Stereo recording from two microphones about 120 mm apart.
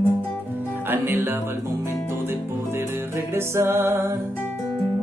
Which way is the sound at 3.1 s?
20° right (ahead or behind).